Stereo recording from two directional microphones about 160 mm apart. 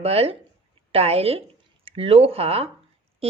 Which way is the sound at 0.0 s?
40° right (ahead or behind).